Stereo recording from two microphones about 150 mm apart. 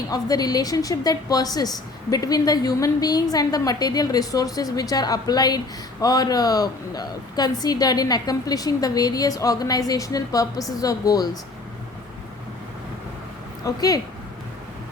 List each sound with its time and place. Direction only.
0.1 s a woman's voice: 25° left (ahead or behind)
13.7 s a woman's voice: 25° left (ahead or behind)